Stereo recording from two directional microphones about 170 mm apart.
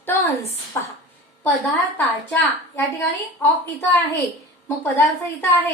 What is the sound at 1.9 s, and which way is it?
Speech, 10° left (ahead or behind).